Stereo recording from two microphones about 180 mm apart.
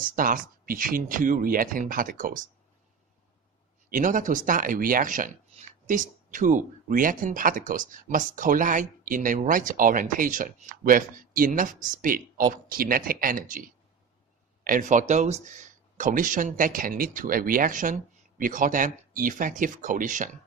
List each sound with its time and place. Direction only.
0.0 s speech: 50° right (ahead or behind)
3.8 s speech: 45° right (ahead or behind)
14.6 s speech: 50° right (ahead or behind)